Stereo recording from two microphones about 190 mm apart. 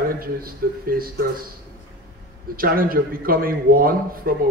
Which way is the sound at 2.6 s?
50° right (ahead or behind).